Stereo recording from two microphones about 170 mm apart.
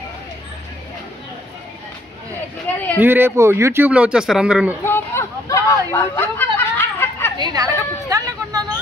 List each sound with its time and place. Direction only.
2.7 s speech: 10° left (ahead or behind)
3.0 s speech: 10° right (ahead or behind)
4.8 s hubbub: 15° left (ahead or behind)
7.3 s chatter: 25° right (ahead or behind)